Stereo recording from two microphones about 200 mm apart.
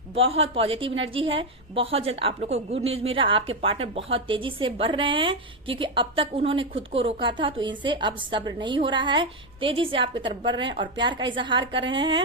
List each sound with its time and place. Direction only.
0.1 s a woman's voice: 30° right (ahead or behind)